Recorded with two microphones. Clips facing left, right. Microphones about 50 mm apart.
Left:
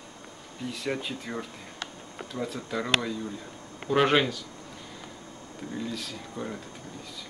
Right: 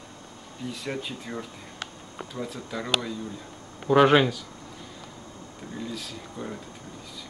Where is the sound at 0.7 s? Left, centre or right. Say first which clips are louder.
Left 2 dB; centre.